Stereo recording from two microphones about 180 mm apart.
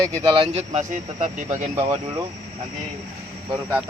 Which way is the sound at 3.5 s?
10° right (ahead or behind).